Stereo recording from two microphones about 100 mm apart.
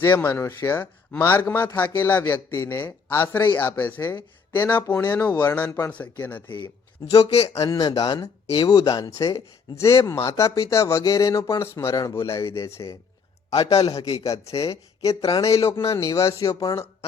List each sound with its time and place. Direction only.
0.0 s speech: 20° left (ahead or behind)
7.2 s speech: 90° left
7.5 s speech: 30° left (ahead or behind)
13.6 s speech: 40° left (ahead or behind)